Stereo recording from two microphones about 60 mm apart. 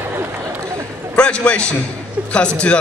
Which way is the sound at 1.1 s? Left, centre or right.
Centre.